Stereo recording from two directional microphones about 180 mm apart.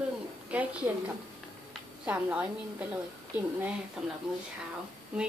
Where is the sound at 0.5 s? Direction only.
10° right (ahead or behind).